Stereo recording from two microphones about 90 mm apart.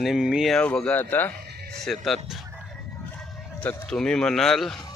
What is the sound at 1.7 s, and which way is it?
Speech, 5° left (ahead or behind).